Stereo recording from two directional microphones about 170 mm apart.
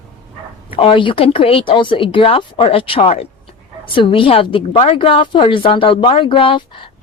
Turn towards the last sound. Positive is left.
turn(degrees=30)  # may be behind; listen again after turning